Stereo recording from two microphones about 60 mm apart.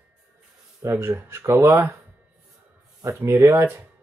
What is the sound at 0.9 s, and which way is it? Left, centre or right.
Speech, right.